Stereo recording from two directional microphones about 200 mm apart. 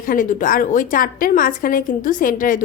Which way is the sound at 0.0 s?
40° left (ahead or behind).